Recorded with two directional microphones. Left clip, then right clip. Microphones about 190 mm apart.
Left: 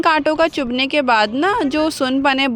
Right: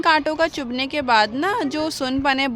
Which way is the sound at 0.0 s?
30° left (ahead or behind).